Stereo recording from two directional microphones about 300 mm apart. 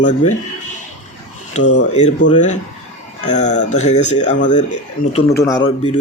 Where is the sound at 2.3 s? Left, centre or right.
Left.